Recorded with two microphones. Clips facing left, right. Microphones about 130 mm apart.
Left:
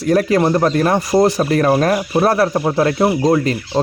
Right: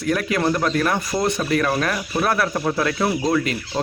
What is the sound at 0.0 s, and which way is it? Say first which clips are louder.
Speech: left 7 dB; 35° left (ahead or behind).